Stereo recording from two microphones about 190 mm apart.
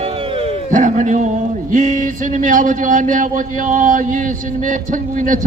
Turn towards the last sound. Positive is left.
turn(degrees=-45)  # may be behind; listen again after turning